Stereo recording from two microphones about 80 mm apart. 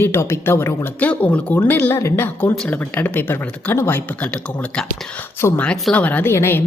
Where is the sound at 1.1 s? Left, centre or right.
Centre.